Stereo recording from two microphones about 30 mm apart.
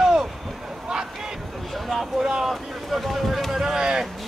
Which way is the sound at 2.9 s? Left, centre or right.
Centre.